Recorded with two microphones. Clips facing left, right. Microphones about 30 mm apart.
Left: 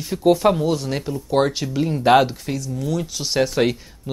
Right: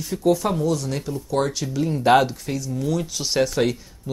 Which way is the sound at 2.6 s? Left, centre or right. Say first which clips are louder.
Right 1 dB; centre.